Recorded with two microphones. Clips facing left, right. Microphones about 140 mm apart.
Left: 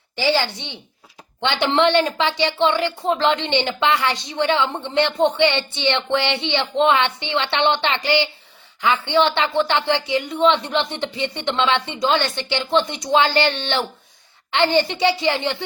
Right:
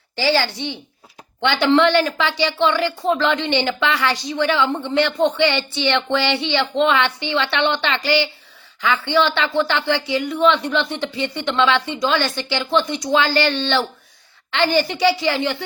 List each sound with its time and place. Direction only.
0.2 s a woman's voice: 20° left (ahead or behind)